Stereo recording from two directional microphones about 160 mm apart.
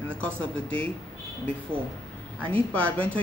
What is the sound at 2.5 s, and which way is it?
Speech, 10° left (ahead or behind).